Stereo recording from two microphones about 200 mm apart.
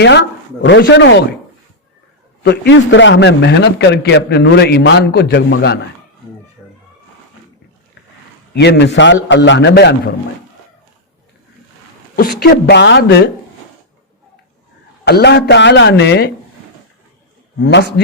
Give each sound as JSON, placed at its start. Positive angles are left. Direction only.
{"t": 0.0, "sound": "a man's voice", "side_deg": 60}
{"t": 2.4, "sound": "a man's voice", "side_deg": 60}
{"t": 6.6, "sound": "a sound", "side_deg": 0}
{"t": 8.5, "sound": "a man's voice", "side_deg": 60}
{"t": 12.1, "sound": "a man's voice", "side_deg": 50}
{"t": 15.0, "sound": "a man's voice", "side_deg": 55}
{"t": 17.6, "sound": "a man's voice", "side_deg": 60}